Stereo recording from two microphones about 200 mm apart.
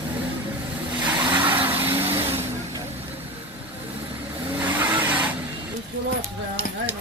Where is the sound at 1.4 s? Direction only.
10° right (ahead or behind).